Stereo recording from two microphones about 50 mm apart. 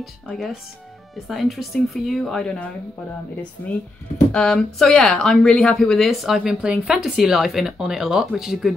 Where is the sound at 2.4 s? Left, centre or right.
Left.